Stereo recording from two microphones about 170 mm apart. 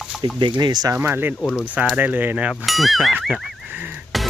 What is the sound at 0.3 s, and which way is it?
Speech, 30° right (ahead or behind).